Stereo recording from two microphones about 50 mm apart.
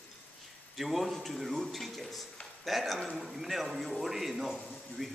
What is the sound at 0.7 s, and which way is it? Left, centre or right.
A man's voice, centre.